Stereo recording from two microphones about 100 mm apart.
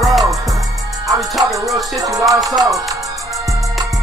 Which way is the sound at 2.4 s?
35° right (ahead or behind).